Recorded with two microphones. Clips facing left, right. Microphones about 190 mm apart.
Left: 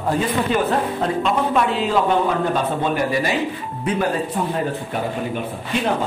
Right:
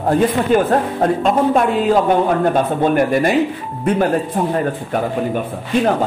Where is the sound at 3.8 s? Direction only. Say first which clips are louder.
Right 6 dB; 50° right (ahead or behind).